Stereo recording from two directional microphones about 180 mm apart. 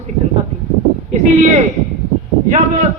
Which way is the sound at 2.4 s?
45° right (ahead or behind).